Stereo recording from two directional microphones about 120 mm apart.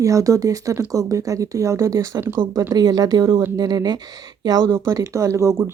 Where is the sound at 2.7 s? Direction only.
30° right (ahead or behind).